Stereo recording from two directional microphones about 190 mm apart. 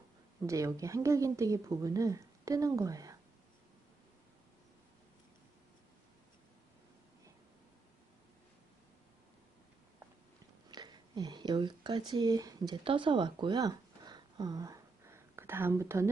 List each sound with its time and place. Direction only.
0.4 s a woman's voice: 15° right (ahead or behind)
10.7 s speech: 20° right (ahead or behind)